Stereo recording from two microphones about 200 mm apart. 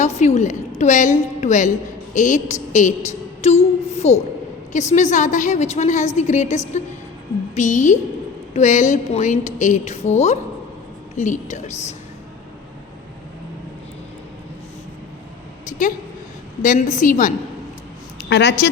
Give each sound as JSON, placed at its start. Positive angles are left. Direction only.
{"t": 0.0, "sound": "a woman's voice", "side_deg": 35}
{"t": 16.6, "sound": "a woman's voice", "side_deg": 40}
{"t": 18.2, "sound": "a sound", "side_deg": 55}